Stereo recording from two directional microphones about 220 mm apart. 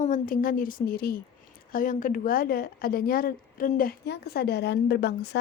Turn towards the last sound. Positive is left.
turn(degrees=50)  # may be behind; listen again after turning